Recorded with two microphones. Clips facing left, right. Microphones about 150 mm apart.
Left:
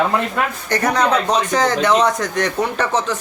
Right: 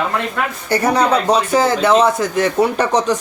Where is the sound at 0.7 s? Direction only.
10° right (ahead or behind).